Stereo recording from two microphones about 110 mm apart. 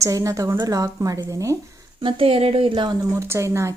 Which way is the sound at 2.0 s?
60° right (ahead or behind).